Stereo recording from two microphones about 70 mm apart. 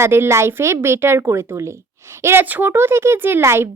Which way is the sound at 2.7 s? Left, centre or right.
Right.